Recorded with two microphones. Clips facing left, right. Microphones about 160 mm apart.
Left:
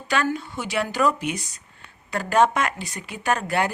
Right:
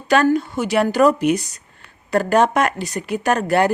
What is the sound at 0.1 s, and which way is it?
Speech, 40° right (ahead or behind).